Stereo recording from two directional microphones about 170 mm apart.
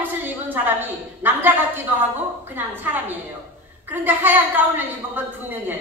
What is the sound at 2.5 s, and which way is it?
A woman's voice, 10° right (ahead or behind).